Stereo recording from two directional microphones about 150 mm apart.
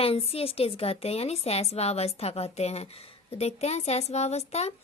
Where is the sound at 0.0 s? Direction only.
40° left (ahead or behind).